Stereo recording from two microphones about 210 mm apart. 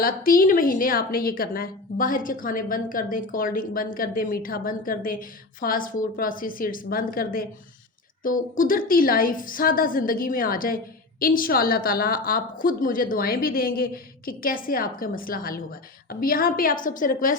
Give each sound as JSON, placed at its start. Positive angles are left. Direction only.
{"t": 0.0, "sound": "a woman's voice", "side_deg": 40}